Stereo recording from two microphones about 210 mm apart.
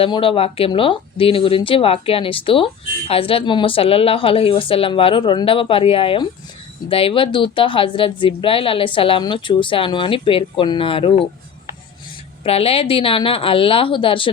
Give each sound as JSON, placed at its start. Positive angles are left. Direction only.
{"t": 0.0, "sound": "speech", "side_deg": 25}
{"t": 12.4, "sound": "speech", "side_deg": 30}